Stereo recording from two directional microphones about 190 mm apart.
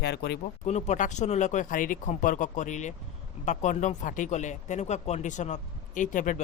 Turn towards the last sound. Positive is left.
turn(degrees=40)  # may be behind; listen again after turning